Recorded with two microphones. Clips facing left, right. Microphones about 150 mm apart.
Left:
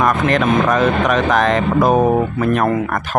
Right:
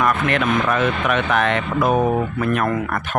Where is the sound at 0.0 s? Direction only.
40° left (ahead or behind).